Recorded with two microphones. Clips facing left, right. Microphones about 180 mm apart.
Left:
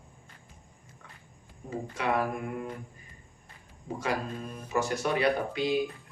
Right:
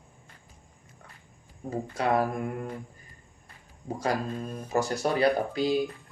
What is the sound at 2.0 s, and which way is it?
Speech, 40° right (ahead or behind).